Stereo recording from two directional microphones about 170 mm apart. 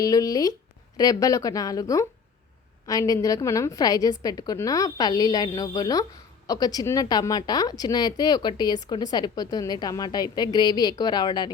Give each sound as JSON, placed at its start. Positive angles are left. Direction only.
{"t": 0.0, "sound": "a woman's voice", "side_deg": 20}